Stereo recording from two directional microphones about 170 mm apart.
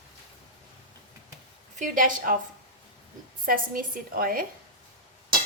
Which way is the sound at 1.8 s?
50° right (ahead or behind).